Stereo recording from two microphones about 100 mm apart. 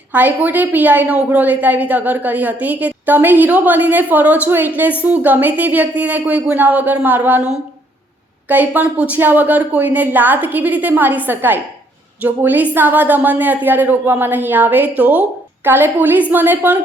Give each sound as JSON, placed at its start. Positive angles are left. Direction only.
{"t": 0.1, "sound": "a woman's voice", "side_deg": -15}
{"t": 8.4, "sound": "a woman's voice", "side_deg": -15}